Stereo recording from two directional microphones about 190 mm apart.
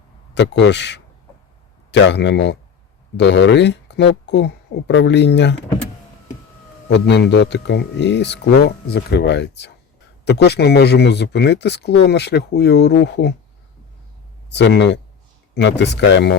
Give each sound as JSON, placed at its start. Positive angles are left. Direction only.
{"t": 0.3, "sound": "speech", "side_deg": 65}
{"t": 6.8, "sound": "speech", "side_deg": 65}
{"t": 14.5, "sound": "speech", "side_deg": 65}